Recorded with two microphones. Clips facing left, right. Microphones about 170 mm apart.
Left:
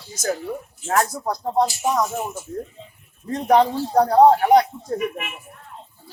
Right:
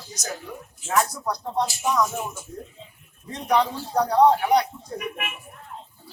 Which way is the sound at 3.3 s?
50° left (ahead or behind).